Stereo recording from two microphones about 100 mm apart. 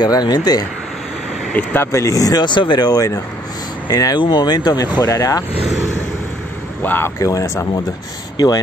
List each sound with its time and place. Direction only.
0.0 s speech: 45° left (ahead or behind)
1.5 s speech: 15° left (ahead or behind); by 4.8 s 45° left (ahead or behind)
4.9 s speech: 35° left (ahead or behind)
6.8 s speech: 20° left (ahead or behind)
7.2 s speech: 35° left (ahead or behind)